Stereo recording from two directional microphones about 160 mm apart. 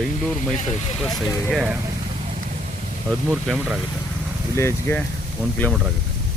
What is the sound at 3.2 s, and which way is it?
Speech, centre (ahead or behind).